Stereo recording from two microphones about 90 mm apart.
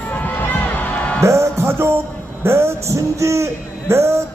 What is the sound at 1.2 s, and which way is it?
Music, 30° right (ahead or behind).